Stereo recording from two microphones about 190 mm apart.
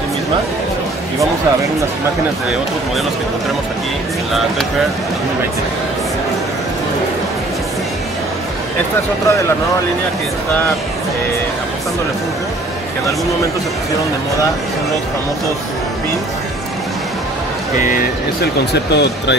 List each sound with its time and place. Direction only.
17.7 s speech: 45° left (ahead or behind); by 19.3 s 60° left (ahead or behind)